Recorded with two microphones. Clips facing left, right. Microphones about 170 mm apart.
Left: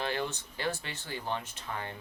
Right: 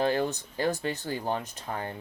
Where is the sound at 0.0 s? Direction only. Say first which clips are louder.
Right 7 dB; 40° right (ahead or behind).